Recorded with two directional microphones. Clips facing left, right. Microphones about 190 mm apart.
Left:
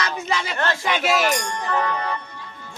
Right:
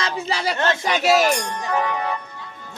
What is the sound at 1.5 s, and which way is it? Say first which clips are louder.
Speech: right 1 dB; 20° right (ahead or behind).